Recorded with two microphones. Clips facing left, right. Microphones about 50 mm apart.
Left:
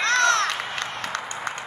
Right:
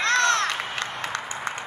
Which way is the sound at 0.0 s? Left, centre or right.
Centre.